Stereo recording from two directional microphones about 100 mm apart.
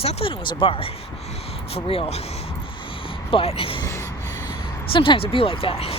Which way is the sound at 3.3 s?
65° left (ahead or behind).